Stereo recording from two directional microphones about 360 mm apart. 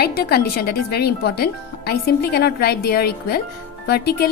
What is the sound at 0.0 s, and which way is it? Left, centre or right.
Speech, left.